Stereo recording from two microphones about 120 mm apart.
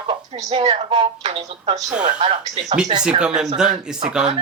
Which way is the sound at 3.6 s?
5° right (ahead or behind).